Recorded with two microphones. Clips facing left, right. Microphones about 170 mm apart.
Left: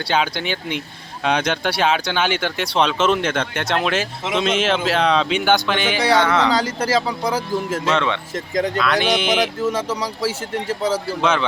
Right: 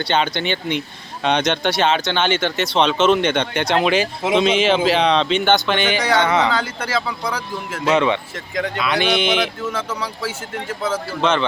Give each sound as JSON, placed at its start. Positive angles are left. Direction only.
{"t": 0.1, "sound": "speech", "side_deg": 5}
{"t": 6.5, "sound": "speech", "side_deg": 40}
{"t": 7.9, "sound": "speech", "side_deg": -10}
{"t": 9.3, "sound": "speech", "side_deg": 40}
{"t": 11.2, "sound": "speech", "side_deg": 5}